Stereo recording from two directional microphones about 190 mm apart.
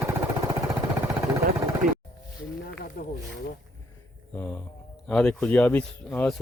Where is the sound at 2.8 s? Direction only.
50° left (ahead or behind).